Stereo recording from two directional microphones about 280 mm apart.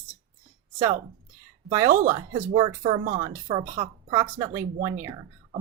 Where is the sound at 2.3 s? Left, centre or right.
Centre.